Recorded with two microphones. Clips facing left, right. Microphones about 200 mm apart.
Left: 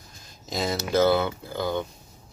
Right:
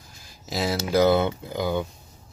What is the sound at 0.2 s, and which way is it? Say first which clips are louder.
Speech: right 1 dB; 5° right (ahead or behind).